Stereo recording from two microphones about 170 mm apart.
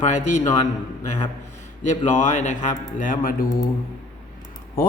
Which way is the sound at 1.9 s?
45° left (ahead or behind).